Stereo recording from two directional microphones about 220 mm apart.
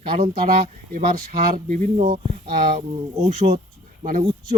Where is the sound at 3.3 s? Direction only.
30° right (ahead or behind).